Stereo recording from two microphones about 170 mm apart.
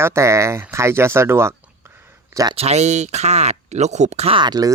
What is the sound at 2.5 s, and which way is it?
Speech, 40° right (ahead or behind).